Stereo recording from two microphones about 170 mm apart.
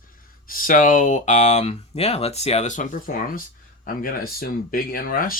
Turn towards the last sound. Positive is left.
turn(degrees=55)  # may be behind; listen again after turning